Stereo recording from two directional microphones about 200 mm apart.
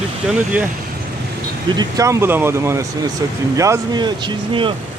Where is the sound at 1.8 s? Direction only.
15° right (ahead or behind).